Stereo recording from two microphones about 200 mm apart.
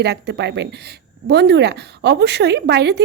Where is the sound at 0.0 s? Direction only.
55° right (ahead or behind).